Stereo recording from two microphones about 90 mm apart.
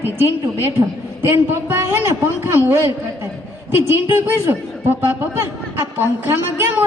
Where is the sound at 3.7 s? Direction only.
25° right (ahead or behind).